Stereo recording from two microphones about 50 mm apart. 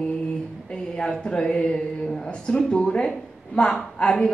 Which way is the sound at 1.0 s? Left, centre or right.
Centre.